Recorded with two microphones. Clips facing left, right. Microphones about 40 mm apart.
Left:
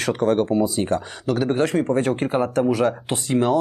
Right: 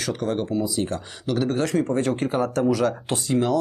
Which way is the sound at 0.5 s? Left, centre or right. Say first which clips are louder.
Left 4 dB; left.